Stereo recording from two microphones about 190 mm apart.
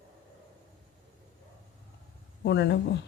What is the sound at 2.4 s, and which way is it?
Speech, 60° left (ahead or behind).